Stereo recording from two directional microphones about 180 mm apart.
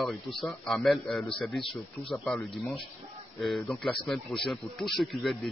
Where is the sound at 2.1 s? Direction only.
5° left (ahead or behind).